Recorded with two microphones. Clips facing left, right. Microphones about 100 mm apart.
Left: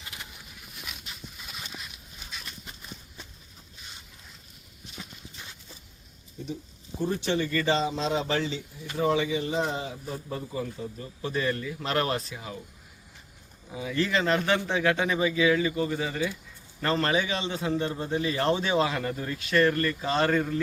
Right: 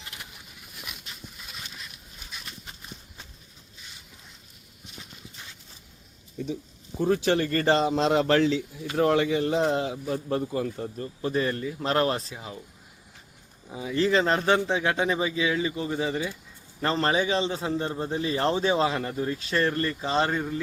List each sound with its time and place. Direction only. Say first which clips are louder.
7.0 s a man's voice: right 4 dB; 90° right; by 12.5 s 25° right (ahead or behind)
13.7 s a man's voice: right 4 dB; 30° right (ahead or behind)